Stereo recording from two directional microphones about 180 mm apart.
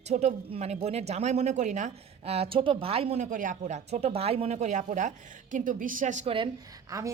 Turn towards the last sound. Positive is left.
turn(degrees=-15)  # may be behind; listen again after turning